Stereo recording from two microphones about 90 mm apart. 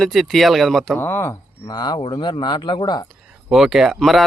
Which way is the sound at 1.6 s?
50° left (ahead or behind).